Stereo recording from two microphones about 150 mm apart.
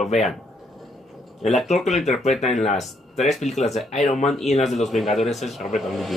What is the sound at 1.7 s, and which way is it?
Speech, centre (ahead or behind).